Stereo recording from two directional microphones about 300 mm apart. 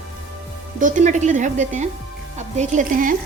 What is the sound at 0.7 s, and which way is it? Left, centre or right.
A woman's voice, right.